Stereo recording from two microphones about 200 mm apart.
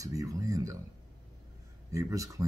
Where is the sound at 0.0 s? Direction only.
15° right (ahead or behind).